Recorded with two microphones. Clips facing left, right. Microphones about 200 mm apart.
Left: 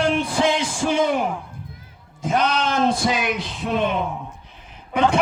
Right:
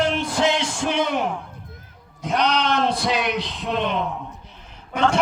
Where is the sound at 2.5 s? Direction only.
45° left (ahead or behind).